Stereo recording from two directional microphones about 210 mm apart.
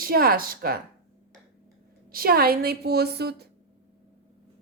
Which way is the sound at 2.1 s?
45° right (ahead or behind).